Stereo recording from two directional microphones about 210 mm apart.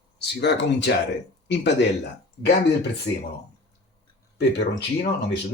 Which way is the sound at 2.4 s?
55° left (ahead or behind).